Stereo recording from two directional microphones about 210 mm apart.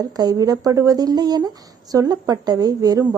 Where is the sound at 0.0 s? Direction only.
15° right (ahead or behind).